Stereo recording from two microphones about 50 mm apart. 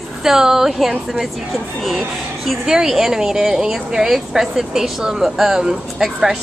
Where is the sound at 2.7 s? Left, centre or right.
Centre.